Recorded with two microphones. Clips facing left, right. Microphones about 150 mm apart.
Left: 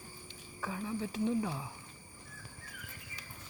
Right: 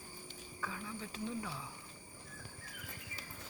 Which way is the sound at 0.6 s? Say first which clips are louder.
Left 6 dB; 30° left (ahead or behind).